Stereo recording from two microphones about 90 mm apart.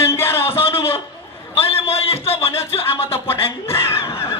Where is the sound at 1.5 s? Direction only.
90° left.